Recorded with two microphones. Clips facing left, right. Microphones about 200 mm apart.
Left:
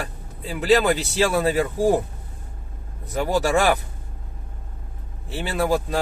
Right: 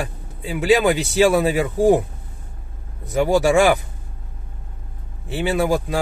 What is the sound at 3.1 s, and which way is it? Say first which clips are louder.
Speech: right 5 dB; 15° right (ahead or behind).